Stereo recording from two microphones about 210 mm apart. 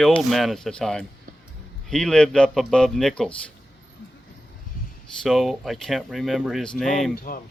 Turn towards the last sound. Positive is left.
turn(degrees=0)  # may be behind; listen again after turning